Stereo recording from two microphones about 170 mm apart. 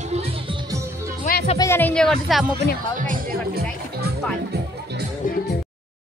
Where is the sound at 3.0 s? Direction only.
50° right (ahead or behind).